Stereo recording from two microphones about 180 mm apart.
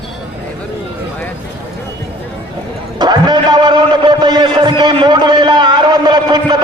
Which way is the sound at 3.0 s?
25° right (ahead or behind).